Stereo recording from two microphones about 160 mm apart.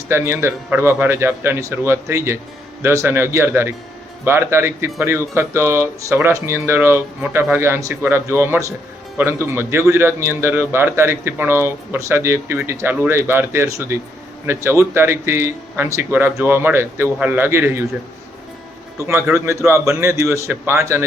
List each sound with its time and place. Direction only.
0.1 s a man's voice: 15° right (ahead or behind)
18.9 s a man's voice: 15° right (ahead or behind)